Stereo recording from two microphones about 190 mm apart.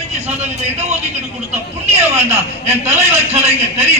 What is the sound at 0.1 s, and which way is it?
Speech, 35° right (ahead or behind).